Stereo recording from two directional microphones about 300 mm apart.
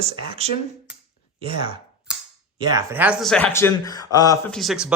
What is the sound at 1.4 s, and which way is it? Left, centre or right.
Speech, centre.